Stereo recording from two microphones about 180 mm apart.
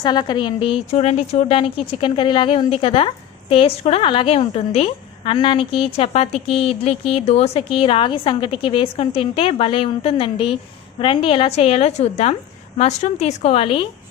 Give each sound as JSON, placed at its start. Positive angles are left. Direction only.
{"t": 0.0, "sound": "a woman's voice", "side_deg": 25}